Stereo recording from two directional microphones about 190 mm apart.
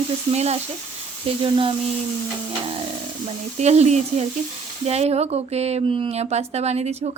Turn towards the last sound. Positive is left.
turn(degrees=-35)  # may be behind; listen again after turning